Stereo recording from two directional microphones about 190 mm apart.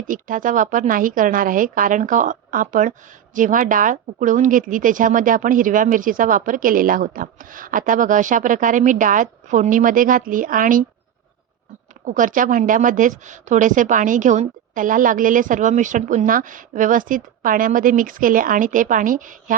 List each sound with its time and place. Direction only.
0.1 s a woman's voice: 45° right (ahead or behind)
12.0 s a woman's voice: 45° right (ahead or behind)